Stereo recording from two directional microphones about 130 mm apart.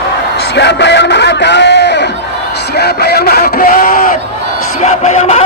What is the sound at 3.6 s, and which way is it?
Speech, 90° left.